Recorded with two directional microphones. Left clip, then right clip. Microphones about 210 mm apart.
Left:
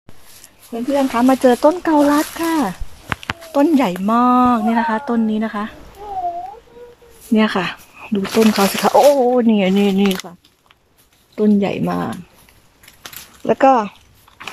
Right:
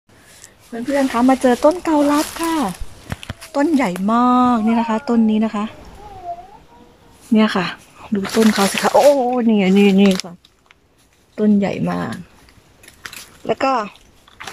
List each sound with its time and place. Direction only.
0.7 s speech: 5° left (ahead or behind)
7.3 s speech: centre (ahead or behind)
9.2 s speech: centre (ahead or behind)
11.3 s speech: 10° left (ahead or behind)
13.0 s a sound: 15° left (ahead or behind)